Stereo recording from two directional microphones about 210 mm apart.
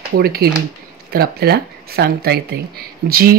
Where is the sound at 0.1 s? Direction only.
45° right (ahead or behind).